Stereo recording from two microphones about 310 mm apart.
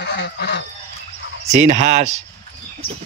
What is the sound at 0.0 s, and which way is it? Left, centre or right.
Goose, left.